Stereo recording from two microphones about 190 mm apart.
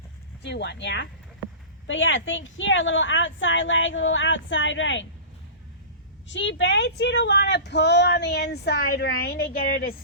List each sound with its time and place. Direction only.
0.4 s speech: 65° left (ahead or behind)
1.9 s a woman's voice: 80° left
6.2 s speech: 70° left (ahead or behind); by 9.9 s 50° left (ahead or behind)